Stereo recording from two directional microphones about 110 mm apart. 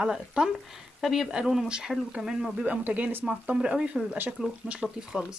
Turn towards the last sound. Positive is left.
turn(degrees=-5)  # may be behind; listen again after turning